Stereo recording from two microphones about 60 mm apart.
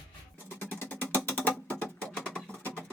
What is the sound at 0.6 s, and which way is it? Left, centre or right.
Music, left.